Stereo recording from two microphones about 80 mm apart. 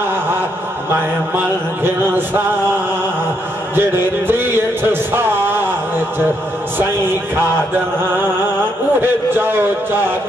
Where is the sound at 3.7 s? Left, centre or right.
Right.